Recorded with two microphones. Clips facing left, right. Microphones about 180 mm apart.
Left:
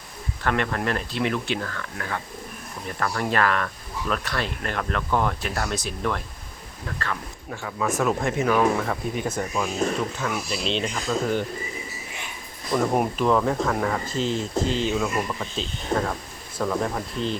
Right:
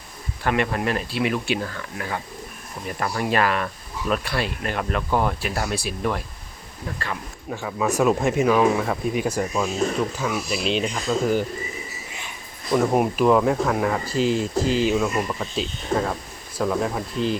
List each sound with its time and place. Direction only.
0.4 s speech: 15° right (ahead or behind)
12.7 s speech: 5° right (ahead or behind)